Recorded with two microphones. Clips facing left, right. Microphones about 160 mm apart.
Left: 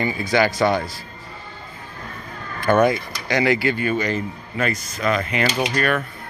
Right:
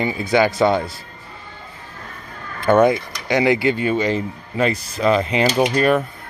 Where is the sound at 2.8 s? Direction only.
20° right (ahead or behind).